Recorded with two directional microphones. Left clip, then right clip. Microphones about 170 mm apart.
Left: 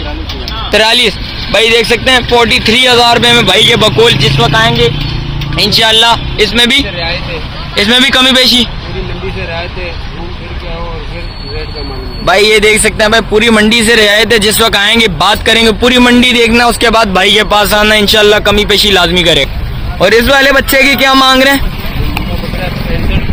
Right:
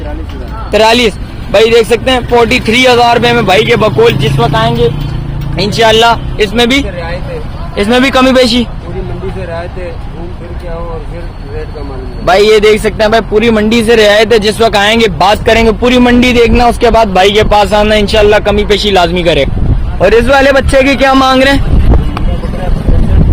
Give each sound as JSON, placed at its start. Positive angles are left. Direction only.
{"t": 0.7, "sound": "a man's voice", "side_deg": -10}
{"t": 4.4, "sound": "speech", "side_deg": -20}
{"t": 5.8, "sound": "a man's voice", "side_deg": -5}
{"t": 12.2, "sound": "a man's voice", "side_deg": 0}